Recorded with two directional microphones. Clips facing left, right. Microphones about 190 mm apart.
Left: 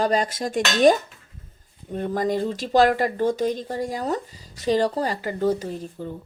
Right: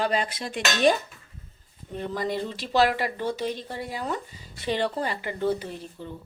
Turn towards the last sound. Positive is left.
turn(degrees=45)  # may be behind; listen again after turning